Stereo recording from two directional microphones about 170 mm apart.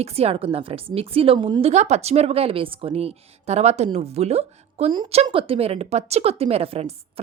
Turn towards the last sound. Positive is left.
turn(degrees=-35)  # may be behind; listen again after turning